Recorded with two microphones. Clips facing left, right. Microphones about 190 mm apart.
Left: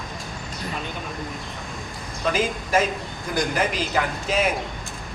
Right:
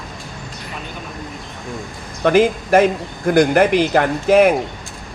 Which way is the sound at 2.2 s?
60° right (ahead or behind).